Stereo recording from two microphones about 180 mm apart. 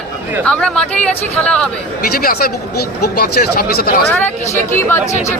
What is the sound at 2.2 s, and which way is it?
Speech, 55° left (ahead or behind).